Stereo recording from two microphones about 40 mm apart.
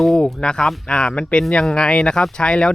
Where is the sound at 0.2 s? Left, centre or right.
Centre.